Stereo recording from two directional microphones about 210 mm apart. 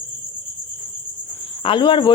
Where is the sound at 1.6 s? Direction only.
25° left (ahead or behind).